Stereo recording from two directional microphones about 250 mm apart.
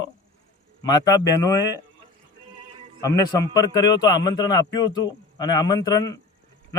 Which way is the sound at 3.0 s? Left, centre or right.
Centre.